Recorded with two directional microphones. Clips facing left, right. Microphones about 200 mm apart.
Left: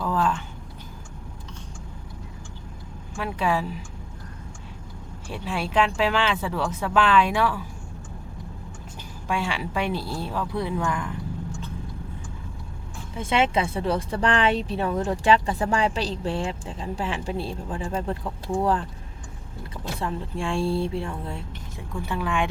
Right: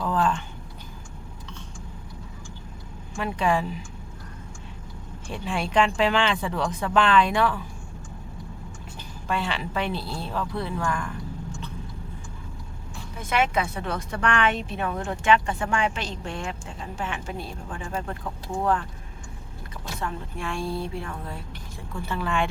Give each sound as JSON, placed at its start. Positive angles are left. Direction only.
{"t": 0.0, "sound": "speech", "side_deg": 5}
{"t": 3.2, "sound": "speech", "side_deg": 5}
{"t": 5.3, "sound": "speech", "side_deg": 5}
{"t": 9.2, "sound": "speech", "side_deg": 10}
{"t": 13.1, "sound": "speech", "side_deg": 30}
{"t": 20.0, "sound": "a woman's voice", "side_deg": 30}
{"t": 21.9, "sound": "speech", "side_deg": 15}